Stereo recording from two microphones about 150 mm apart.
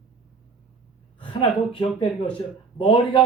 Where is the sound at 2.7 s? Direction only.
35° left (ahead or behind).